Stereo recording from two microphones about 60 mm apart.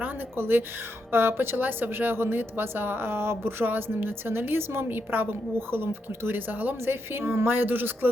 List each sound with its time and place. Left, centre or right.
0.0 s a woman's voice: right